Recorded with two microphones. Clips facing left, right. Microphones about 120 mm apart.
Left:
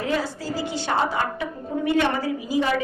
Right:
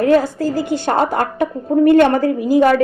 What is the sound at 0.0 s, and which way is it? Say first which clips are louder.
A woman's voice: right 12 dB; 55° right (ahead or behind).